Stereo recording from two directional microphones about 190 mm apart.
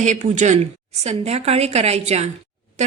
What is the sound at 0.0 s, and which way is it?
A woman's voice, 40° right (ahead or behind).